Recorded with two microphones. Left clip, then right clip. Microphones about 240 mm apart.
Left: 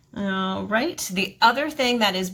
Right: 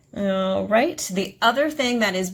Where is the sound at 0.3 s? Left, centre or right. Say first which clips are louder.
Right 4 dB; centre.